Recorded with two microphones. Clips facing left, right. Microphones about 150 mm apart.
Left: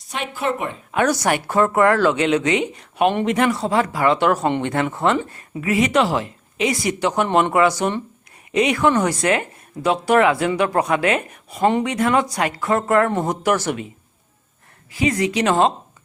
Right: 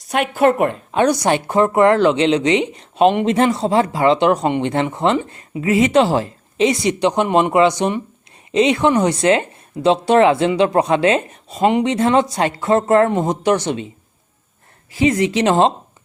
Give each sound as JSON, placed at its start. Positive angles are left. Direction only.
{"t": 0.1, "sound": "a woman's voice", "side_deg": -60}
{"t": 0.9, "sound": "speech", "side_deg": -20}
{"t": 14.9, "sound": "speech", "side_deg": -25}